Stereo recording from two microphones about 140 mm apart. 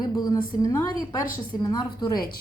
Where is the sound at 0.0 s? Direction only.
30° left (ahead or behind).